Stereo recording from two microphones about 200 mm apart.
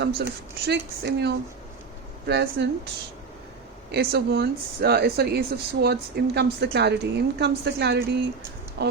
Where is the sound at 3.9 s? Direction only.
55° right (ahead or behind).